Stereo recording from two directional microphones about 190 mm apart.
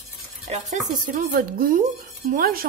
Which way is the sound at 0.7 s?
45° right (ahead or behind).